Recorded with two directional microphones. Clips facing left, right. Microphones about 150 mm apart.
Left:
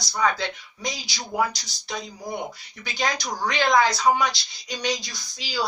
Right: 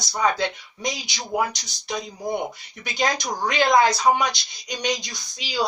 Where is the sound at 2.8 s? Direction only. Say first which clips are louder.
Right 3 dB; 20° right (ahead or behind).